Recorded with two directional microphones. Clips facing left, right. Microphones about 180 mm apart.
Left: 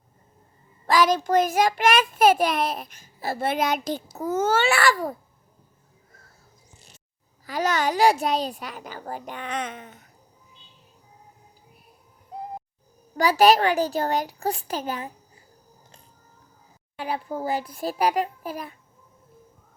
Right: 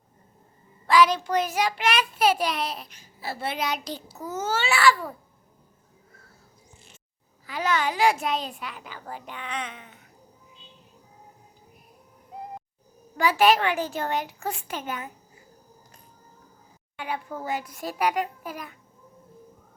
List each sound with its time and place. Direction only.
0.9 s a child's voice: 45° left (ahead or behind)
6.7 s a sound: 40° left (ahead or behind)
7.4 s a child's voice: 40° left (ahead or behind)
13.1 s a child's voice: 40° left (ahead or behind)
17.0 s a child's voice: 35° left (ahead or behind)